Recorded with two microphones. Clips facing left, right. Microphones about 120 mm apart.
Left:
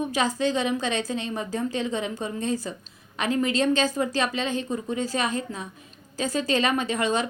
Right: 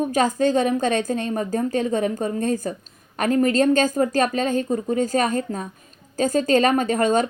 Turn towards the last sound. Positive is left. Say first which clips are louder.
# right 6 dB
turn(degrees=-45)  # may be behind; listen again after turning